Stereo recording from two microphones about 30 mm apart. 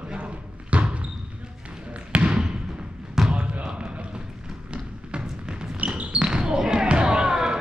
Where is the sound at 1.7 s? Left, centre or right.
Right.